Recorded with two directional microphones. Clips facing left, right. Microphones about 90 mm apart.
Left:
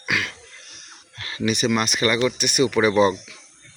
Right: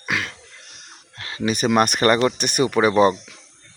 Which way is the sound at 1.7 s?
50° right (ahead or behind).